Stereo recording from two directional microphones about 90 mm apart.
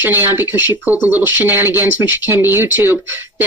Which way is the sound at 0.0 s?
20° right (ahead or behind).